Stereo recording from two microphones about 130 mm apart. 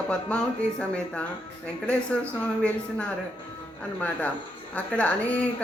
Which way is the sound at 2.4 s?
10° left (ahead or behind).